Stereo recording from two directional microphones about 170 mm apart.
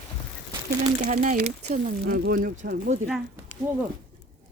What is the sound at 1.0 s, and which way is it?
Speech, 45° right (ahead or behind).